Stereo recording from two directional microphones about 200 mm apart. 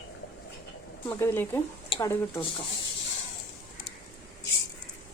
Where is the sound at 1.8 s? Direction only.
25° left (ahead or behind).